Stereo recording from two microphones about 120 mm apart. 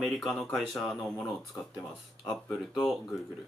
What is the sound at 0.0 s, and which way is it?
Speech, centre (ahead or behind).